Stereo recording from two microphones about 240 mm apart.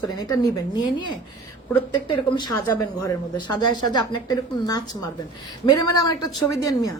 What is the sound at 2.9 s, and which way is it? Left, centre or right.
A woman's voice, centre.